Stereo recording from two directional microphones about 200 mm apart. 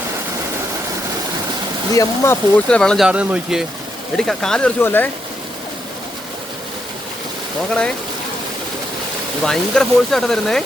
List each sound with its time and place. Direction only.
1.9 s speech: 15° left (ahead or behind)
3.1 s speech: 5° right (ahead or behind); by 5.0 s 10° left (ahead or behind)
7.7 s speech: 5° left (ahead or behind)
9.4 s speech: 5° left (ahead or behind)